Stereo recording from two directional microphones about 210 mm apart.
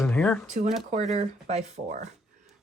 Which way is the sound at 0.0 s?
5° left (ahead or behind).